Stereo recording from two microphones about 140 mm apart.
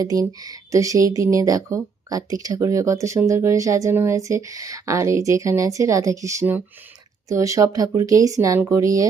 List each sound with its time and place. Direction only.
0.0 s speech: 25° right (ahead or behind)